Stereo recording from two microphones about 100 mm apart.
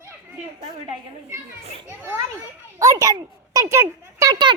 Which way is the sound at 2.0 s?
25° right (ahead or behind).